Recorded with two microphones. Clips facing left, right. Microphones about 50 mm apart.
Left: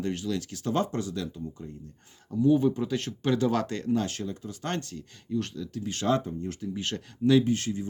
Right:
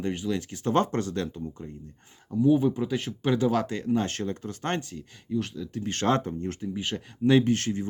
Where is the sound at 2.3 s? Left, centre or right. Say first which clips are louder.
Right 1 dB; centre.